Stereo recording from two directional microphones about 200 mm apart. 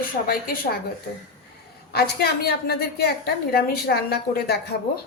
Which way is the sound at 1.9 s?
50° left (ahead or behind).